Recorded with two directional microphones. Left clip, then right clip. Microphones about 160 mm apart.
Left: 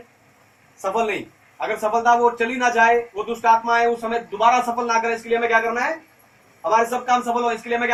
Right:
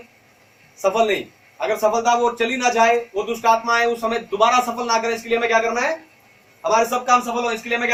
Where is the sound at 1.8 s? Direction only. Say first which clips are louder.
Left 1 dB; 35° right (ahead or behind).